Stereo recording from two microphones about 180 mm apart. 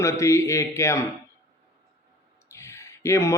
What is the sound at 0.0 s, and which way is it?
Speech, 15° left (ahead or behind).